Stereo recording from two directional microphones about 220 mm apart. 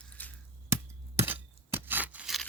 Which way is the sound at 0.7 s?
10° right (ahead or behind).